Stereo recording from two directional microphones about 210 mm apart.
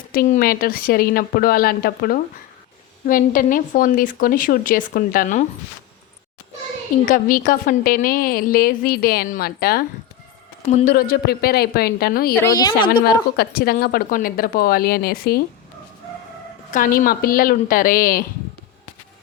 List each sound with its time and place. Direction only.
0.1 s a woman's voice: 45° left (ahead or behind)
7.0 s a woman's voice: 40° left (ahead or behind)
12.3 s a woman's voice: 15° left (ahead or behind)
13.1 s a woman's voice: 45° left (ahead or behind)
16.7 s a woman's voice: 40° left (ahead or behind)